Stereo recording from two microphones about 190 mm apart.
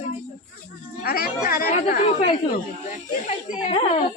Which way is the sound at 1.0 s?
50° left (ahead or behind).